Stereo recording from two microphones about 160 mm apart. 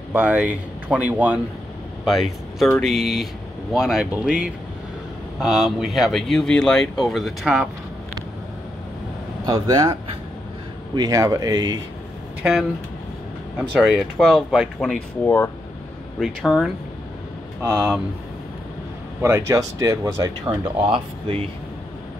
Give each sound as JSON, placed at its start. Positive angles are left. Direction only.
{"t": 0.1, "sound": "speech", "side_deg": -10}
{"t": 9.5, "sound": "speech", "side_deg": -25}
{"t": 11.0, "sound": "speech", "side_deg": -20}
{"t": 13.6, "sound": "speech", "side_deg": 0}
{"t": 15.2, "sound": "speech", "side_deg": 15}
{"t": 16.2, "sound": "speech", "side_deg": 0}
{"t": 19.2, "sound": "speech", "side_deg": -20}
{"t": 20.4, "sound": "speech", "side_deg": -10}
{"t": 20.8, "sound": "speech", "side_deg": -35}